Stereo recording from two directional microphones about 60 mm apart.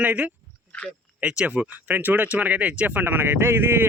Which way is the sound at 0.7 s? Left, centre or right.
Left.